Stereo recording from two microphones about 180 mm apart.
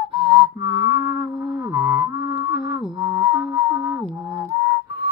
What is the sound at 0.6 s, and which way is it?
Music, 10° right (ahead or behind).